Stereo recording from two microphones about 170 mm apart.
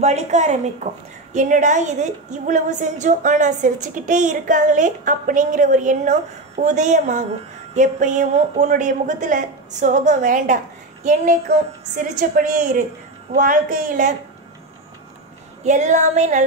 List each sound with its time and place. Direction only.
0.0 s a woman's voice: 40° right (ahead or behind)
15.6 s a woman's voice: 45° right (ahead or behind)